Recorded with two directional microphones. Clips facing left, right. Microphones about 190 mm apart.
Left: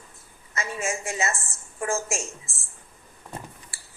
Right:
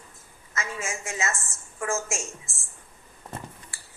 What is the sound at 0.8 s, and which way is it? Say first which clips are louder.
A woman's voice: left 5 dB; 35° left (ahead or behind).